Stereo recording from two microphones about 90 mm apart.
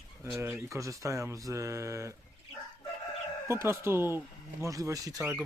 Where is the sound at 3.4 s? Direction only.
30° right (ahead or behind).